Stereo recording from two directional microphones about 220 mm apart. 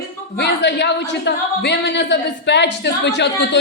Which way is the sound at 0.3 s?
50° left (ahead or behind).